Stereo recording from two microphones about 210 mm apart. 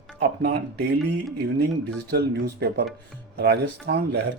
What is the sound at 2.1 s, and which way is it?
Speech, 50° right (ahead or behind).